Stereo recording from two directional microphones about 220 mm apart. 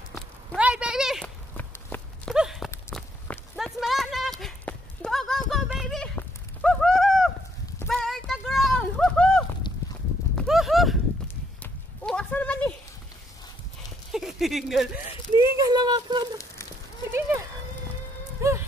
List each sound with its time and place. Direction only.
0.6 s clip-clop: 5° right (ahead or behind)
2.3 s horse: centre (ahead or behind)
2.9 s walk: centre (ahead or behind)
7.8 s a sound: centre (ahead or behind)
10.3 s clip-clop: centre (ahead or behind)
11.6 s horse: 5° left (ahead or behind)
14.1 s a sound: centre (ahead or behind)
15.3 s a sound: 15° right (ahead or behind)
18.4 s music: 15° right (ahead or behind)